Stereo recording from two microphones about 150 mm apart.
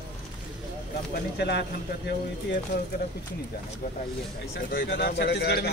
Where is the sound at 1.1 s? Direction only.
90° left.